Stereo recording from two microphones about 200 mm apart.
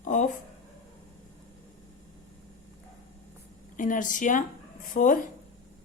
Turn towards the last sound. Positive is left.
turn(degrees=40)  # may be behind; listen again after turning